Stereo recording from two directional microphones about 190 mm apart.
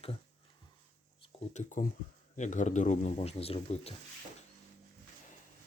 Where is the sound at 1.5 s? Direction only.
40° left (ahead or behind).